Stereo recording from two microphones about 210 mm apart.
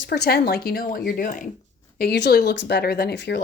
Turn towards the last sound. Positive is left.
turn(degrees=55)  # may be behind; listen again after turning